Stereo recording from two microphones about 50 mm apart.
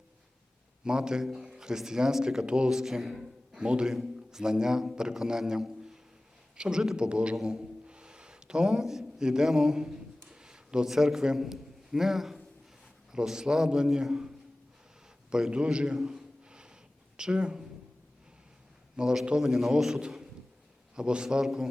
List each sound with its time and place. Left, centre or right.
0.9 s a man's voice: centre
7.3 s a man's voice: centre
7.9 s a sound: centre
8.6 s a man's voice: centre
10.2 s a sound: centre
10.8 s a man's voice: centre
16.5 s a sound: centre
17.2 s speech: centre
18.9 s a man's voice: centre
19.4 s a man's voice: centre